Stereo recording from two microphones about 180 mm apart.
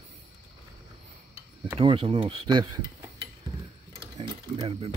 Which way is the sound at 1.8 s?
30° right (ahead or behind).